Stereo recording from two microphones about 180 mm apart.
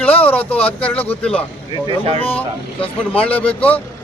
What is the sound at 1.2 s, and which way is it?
Speech, 5° left (ahead or behind).